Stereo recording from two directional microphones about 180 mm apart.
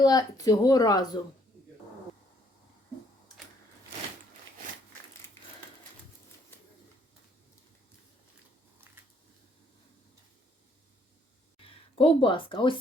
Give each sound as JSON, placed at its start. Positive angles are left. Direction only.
{"t": 0.0, "sound": "speech", "side_deg": 20}
{"t": 11.6, "sound": "speech", "side_deg": 30}